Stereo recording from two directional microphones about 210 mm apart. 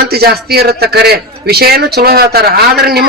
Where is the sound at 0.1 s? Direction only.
50° right (ahead or behind).